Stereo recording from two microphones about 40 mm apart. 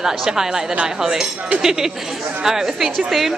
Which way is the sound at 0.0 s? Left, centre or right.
Centre.